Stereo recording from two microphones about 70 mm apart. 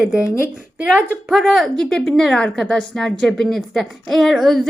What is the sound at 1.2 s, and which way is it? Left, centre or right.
A woman's voice, centre.